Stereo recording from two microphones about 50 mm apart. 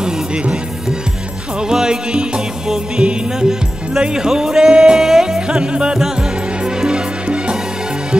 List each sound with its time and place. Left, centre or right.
0.0 s music: centre